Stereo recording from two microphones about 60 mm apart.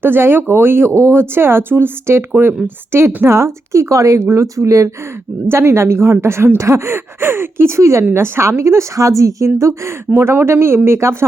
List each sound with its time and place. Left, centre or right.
0.0 s a woman's voice: right
3.2 s speech: right
5.5 s a woman's voice: right